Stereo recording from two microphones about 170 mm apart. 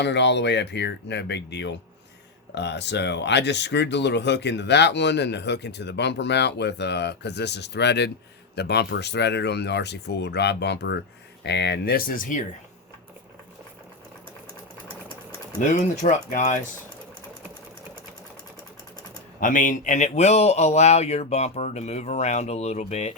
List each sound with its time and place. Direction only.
0.0 s speech: 90° left; by 12.4 s 55° left (ahead or behind)
15.7 s speech: 50° left (ahead or behind)
19.4 s speech: 50° left (ahead or behind)